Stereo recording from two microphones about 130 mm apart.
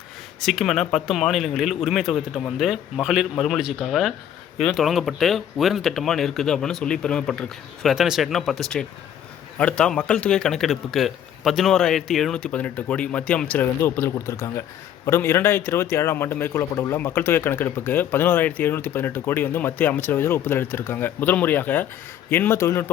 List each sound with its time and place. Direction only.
0.3 s a man's voice: centre (ahead or behind); by 22.9 s 20° left (ahead or behind)